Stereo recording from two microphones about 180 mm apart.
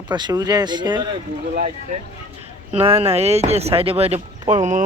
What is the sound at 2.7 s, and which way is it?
Speech, 35° right (ahead or behind).